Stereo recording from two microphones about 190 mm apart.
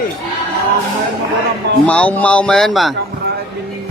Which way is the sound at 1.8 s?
5° left (ahead or behind).